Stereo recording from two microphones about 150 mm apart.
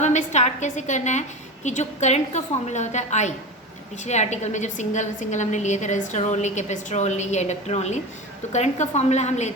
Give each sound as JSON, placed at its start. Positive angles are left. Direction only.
{"t": 0.0, "sound": "a woman's voice", "side_deg": 50}